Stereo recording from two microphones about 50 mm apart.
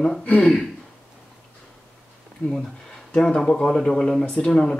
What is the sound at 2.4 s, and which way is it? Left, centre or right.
Speech, left.